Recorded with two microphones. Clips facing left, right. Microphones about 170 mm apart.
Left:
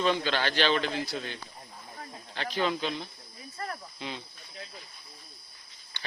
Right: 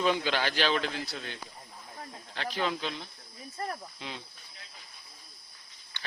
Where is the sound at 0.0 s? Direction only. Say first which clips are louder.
Left 1 dB; 10° right (ahead or behind).